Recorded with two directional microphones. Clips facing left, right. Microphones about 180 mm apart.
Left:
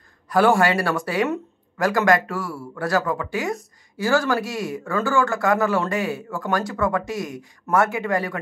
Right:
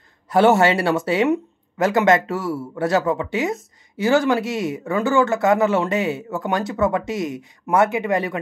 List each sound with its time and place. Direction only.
0.3 s speech: 25° right (ahead or behind)